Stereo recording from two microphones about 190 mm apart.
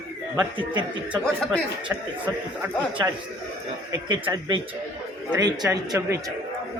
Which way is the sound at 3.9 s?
20° right (ahead or behind).